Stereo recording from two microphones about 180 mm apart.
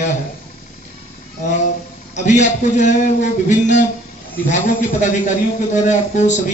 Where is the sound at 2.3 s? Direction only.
40° left (ahead or behind).